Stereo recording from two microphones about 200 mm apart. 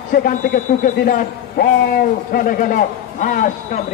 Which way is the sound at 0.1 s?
45° left (ahead or behind).